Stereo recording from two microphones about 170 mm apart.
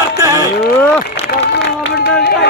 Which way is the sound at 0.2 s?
20° right (ahead or behind).